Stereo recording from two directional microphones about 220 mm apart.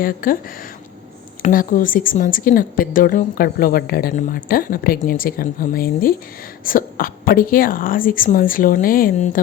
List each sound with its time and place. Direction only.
0.0 s speech: 40° left (ahead or behind)
1.4 s speech: 40° left (ahead or behind)